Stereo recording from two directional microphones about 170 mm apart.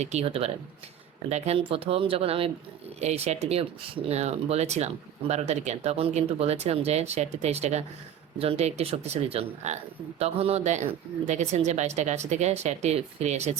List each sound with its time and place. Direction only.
0.0 s speech: 40° right (ahead or behind)